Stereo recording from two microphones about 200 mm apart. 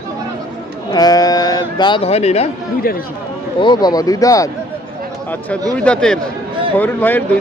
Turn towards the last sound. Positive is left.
turn(degrees=10)  # may be behind; listen again after turning